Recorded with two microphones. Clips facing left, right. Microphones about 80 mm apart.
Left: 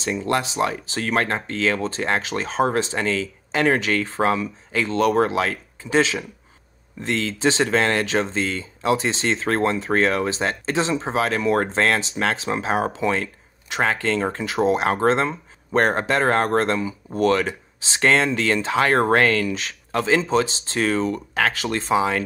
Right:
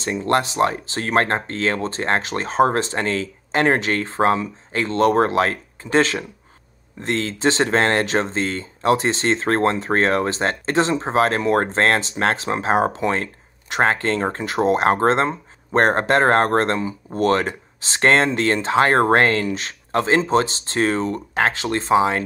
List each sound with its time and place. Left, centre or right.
0.0 s speech: right